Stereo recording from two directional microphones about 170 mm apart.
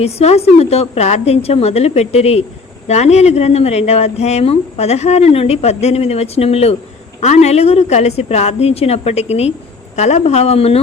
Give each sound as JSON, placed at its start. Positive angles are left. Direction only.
{"t": 0.0, "sound": "speech", "side_deg": 40}